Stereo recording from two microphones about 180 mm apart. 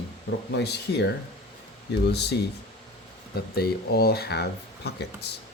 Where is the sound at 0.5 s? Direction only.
70° left (ahead or behind).